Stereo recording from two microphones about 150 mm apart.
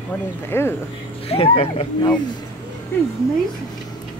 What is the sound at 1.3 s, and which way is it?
Speech, 40° left (ahead or behind).